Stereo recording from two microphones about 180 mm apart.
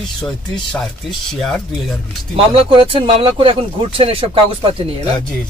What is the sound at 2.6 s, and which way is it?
Speech, 30° right (ahead or behind).